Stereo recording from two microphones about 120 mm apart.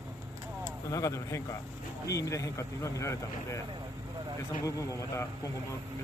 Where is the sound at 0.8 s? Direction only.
25° left (ahead or behind).